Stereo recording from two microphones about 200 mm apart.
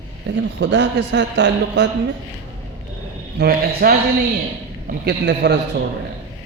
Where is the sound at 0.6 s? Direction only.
60° right (ahead or behind).